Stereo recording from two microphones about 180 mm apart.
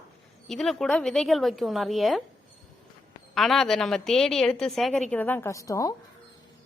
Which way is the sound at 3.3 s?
Centre (ahead or behind).